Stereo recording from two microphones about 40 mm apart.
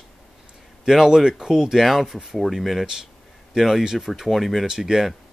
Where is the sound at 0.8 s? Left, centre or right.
Centre.